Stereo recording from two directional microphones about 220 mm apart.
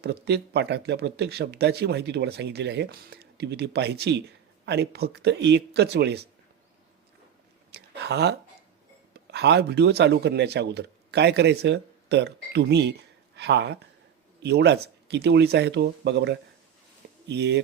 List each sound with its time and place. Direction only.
0.0 s speech: 50° right (ahead or behind)
7.7 s a sound: 50° right (ahead or behind)
9.1 s speech: 50° right (ahead or behind)